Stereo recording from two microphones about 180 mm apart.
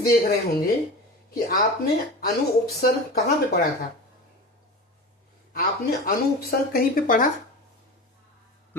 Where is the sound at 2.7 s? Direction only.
60° left (ahead or behind).